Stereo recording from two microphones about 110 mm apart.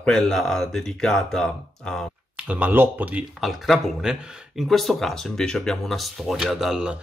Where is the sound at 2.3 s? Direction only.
10° right (ahead or behind).